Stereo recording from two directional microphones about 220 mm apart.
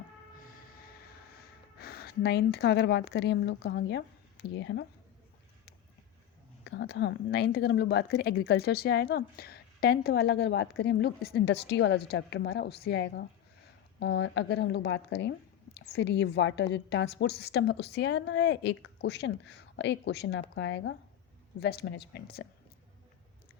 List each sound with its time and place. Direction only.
1.8 s speech: 45° left (ahead or behind)
6.7 s a woman's voice: 50° left (ahead or behind)
21.6 s a woman's voice: 45° left (ahead or behind)